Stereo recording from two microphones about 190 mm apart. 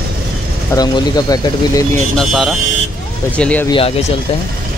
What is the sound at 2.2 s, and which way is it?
Speech, centre (ahead or behind).